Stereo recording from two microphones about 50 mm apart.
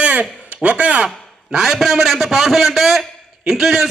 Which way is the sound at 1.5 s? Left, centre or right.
Centre.